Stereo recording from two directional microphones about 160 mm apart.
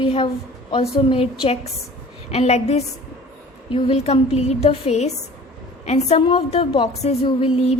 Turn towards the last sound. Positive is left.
turn(degrees=35)  # may be behind; listen again after turning